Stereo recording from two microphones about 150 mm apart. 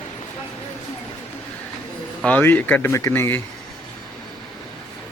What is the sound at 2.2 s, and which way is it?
Speech, 10° left (ahead or behind).